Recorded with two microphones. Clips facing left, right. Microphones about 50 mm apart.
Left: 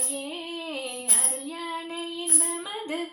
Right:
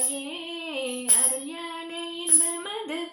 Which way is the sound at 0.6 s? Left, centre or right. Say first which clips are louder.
Right 5 dB; right.